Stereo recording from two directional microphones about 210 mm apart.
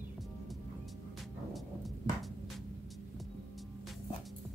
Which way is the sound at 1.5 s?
Centre (ahead or behind).